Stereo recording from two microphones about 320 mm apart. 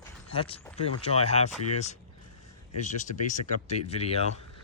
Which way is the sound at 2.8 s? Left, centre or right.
Left.